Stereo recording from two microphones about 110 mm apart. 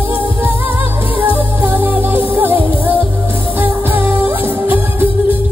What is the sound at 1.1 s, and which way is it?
Music, 15° right (ahead or behind).